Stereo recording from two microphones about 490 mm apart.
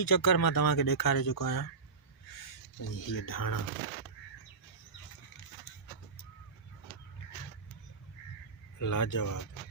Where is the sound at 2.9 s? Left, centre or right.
Left.